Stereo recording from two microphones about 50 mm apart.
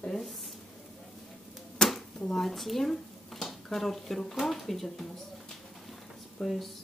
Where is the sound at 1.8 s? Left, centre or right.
Centre.